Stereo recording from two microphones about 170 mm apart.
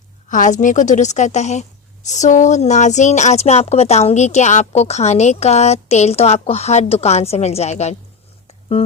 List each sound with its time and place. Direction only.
0.3 s a woman's voice: 50° left (ahead or behind)